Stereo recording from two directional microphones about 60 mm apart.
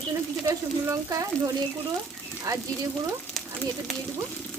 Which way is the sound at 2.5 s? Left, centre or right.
Right.